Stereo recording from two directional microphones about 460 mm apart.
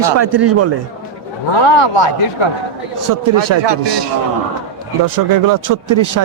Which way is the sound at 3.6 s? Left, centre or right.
Right.